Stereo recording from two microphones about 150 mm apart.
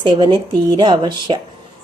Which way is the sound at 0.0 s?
30° right (ahead or behind).